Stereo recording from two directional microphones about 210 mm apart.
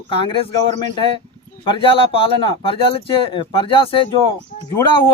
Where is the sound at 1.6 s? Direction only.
25° left (ahead or behind).